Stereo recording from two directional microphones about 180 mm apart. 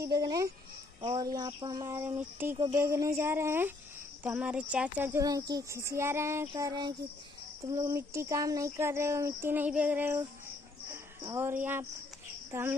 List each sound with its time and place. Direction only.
0.0 s speech: 20° right (ahead or behind)